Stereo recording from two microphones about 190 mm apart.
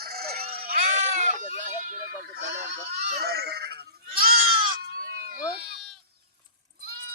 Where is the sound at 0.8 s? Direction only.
40° right (ahead or behind).